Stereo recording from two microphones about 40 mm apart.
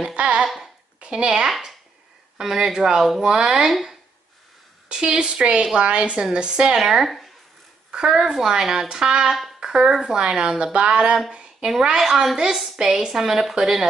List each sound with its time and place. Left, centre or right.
0.0 s a sound: right
1.0 s speech: right
2.3 s a woman's voice: centre
4.8 s a woman's voice: centre
6.7 s a woman's voice: centre
7.9 s a woman's voice: centre